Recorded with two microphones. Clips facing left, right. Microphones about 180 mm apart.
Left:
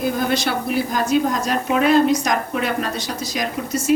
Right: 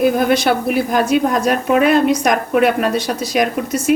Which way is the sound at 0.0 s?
60° right (ahead or behind).